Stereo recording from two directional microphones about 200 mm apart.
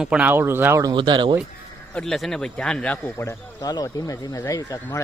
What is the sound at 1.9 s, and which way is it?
Speech, centre (ahead or behind).